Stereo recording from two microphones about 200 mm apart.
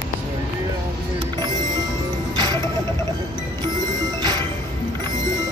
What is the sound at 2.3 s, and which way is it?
Music, 20° right (ahead or behind).